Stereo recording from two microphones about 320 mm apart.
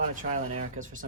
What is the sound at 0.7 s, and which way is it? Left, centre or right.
Speech, right.